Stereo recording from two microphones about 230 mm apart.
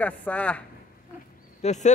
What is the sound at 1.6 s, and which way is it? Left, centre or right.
Speech, left.